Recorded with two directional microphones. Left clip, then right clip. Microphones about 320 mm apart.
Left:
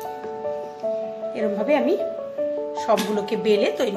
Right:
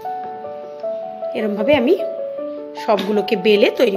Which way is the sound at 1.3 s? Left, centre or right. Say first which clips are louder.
Right 5 dB; right.